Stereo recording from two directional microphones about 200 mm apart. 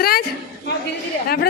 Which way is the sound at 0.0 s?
50° left (ahead or behind).